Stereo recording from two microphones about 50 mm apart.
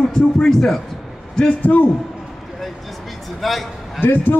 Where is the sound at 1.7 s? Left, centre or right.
Left.